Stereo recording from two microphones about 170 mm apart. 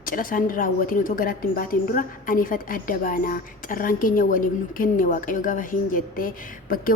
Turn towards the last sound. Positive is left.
turn(degrees=55)  # may be behind; listen again after turning